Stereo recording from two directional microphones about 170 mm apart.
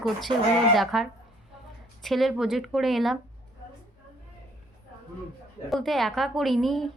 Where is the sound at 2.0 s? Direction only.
Centre (ahead or behind).